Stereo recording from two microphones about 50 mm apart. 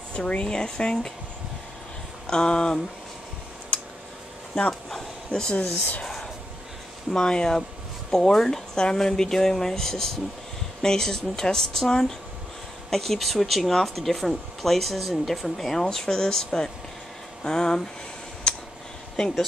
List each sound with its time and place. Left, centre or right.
0.1 s speech: left
2.2 s speech: centre
5.3 s speech: left
6.0 s a sound: centre
7.1 s speech: centre
18.5 s a sound: centre
19.2 s speech: centre